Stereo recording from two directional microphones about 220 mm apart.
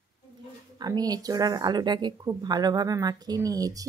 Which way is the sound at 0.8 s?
15° right (ahead or behind).